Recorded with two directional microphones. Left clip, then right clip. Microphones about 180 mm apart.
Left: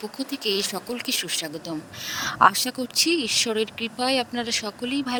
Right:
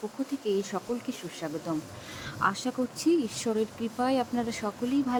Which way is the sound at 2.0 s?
65° left (ahead or behind).